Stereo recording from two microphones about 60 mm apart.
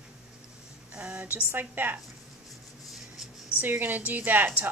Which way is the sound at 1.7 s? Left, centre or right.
Right.